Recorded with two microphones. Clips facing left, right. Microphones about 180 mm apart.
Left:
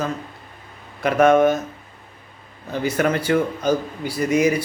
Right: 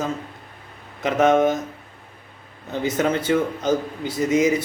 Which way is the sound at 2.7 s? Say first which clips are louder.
Left 1 dB; 20° right (ahead or behind).